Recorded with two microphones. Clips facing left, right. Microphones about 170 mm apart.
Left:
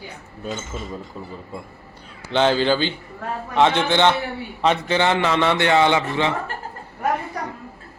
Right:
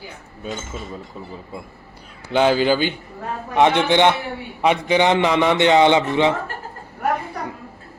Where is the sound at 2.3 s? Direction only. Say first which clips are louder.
Right 2 dB; 10° right (ahead or behind).